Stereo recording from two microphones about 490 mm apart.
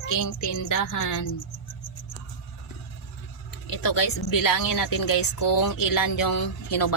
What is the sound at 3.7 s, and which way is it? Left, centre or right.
Speech, left.